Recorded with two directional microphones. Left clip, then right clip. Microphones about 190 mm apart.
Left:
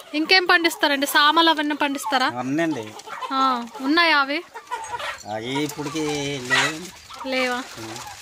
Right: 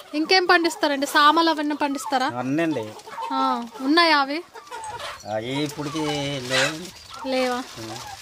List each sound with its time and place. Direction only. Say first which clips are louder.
0.1 s a woman's voice: left 1 dB; 10° right (ahead or behind)
5.3 s a woman's voice: right 1 dB; 5° left (ahead or behind)
7.2 s speech: even; 15° right (ahead or behind)